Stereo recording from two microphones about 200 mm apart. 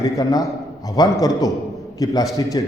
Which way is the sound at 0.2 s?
20° left (ahead or behind).